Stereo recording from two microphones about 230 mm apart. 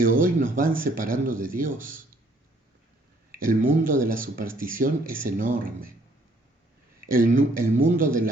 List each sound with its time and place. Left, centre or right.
0.0 s speech: right
3.3 s speech: right
7.1 s speech: right